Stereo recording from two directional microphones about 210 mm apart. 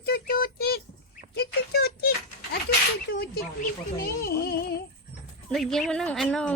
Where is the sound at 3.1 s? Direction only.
50° left (ahead or behind).